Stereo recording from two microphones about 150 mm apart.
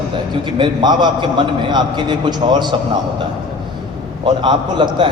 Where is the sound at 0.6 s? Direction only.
30° right (ahead or behind).